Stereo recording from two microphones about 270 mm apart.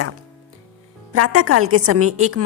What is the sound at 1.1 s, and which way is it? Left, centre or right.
A woman's voice, right.